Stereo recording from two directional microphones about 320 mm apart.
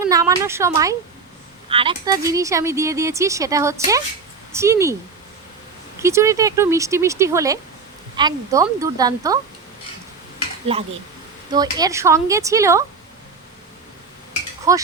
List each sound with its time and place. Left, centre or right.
0.1 s speech: centre
6.0 s speech: centre
10.7 s speech: centre
14.7 s speech: centre